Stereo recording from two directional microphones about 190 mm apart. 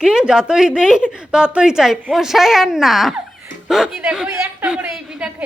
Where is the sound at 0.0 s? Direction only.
5° right (ahead or behind).